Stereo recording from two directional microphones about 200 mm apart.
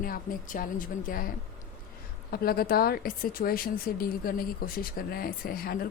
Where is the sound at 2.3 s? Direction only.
50° left (ahead or behind).